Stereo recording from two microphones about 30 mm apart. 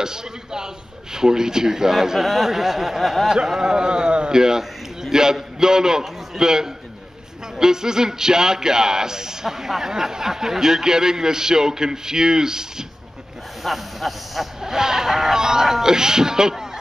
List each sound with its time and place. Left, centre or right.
0.0 s a man's voice: right
3.6 s speech: right
4.3 s speech: centre
13.7 s speech: centre
14.6 s a man's voice: centre